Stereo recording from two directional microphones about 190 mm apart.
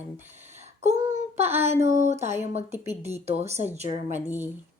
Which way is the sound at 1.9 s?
35° right (ahead or behind).